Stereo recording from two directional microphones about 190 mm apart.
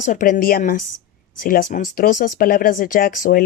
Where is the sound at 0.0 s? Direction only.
40° left (ahead or behind).